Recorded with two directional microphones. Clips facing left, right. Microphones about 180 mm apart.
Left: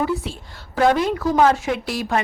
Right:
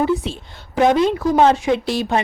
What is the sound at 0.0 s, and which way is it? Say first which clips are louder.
A woman's voice: right 4 dB; 20° right (ahead or behind).